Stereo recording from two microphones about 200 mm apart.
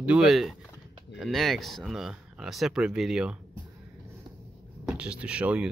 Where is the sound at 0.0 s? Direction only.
5° right (ahead or behind).